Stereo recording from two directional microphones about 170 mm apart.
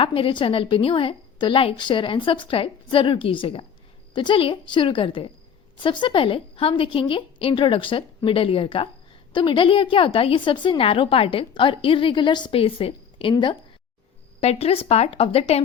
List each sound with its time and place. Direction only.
0.0 s a woman's voice: 30° left (ahead or behind)